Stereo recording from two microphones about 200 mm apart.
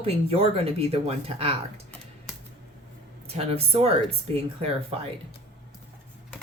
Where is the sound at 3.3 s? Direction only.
30° right (ahead or behind).